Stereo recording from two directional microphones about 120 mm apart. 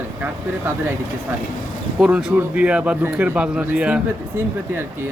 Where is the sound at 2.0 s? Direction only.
10° right (ahead or behind).